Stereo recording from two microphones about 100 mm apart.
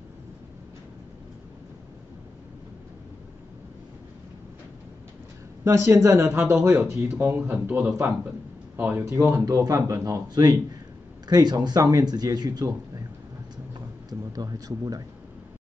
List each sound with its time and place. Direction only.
5.6 s speech: 30° right (ahead or behind)
9.1 s speech: 35° right (ahead or behind)
14.3 s speech: 40° right (ahead or behind)